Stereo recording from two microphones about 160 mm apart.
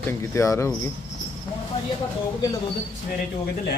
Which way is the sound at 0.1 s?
15° left (ahead or behind).